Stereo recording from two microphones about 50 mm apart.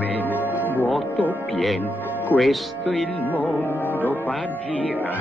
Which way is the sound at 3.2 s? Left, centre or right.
Left.